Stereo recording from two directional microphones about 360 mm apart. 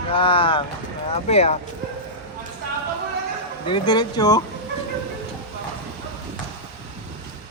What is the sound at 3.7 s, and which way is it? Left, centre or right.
Speech, centre.